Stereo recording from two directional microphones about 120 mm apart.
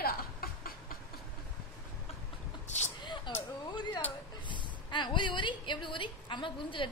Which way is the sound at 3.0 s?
40° left (ahead or behind).